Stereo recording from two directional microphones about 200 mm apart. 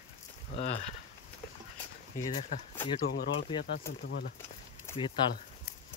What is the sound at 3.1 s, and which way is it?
Speech, 55° left (ahead or behind).